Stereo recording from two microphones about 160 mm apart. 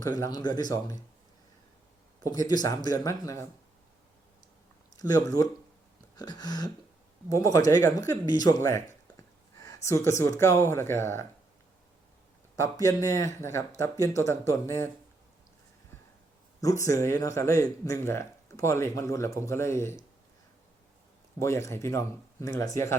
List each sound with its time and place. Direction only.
0.2 s speech: 25° left (ahead or behind)
2.5 s speech: 25° left (ahead or behind)
4.9 s speech: 20° left (ahead or behind)
12.5 s speech: 20° left (ahead or behind)
16.6 s speech: 20° left (ahead or behind)
21.3 s speech: 20° left (ahead or behind)